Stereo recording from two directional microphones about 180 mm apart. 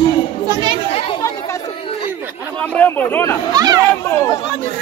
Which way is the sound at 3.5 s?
20° right (ahead or behind).